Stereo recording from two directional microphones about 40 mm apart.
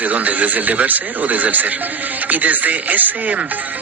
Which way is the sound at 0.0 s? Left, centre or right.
Right.